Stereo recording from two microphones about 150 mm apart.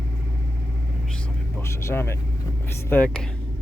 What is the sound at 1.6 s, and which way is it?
Speech, 15° left (ahead or behind).